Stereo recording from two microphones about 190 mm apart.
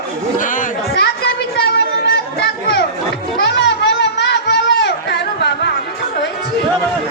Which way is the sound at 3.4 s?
65° left (ahead or behind).